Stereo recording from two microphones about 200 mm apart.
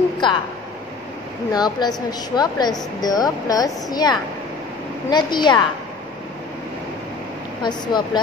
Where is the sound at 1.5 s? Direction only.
20° left (ahead or behind).